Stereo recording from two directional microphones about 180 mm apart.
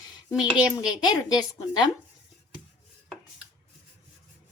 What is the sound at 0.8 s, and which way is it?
Speech, 25° left (ahead or behind).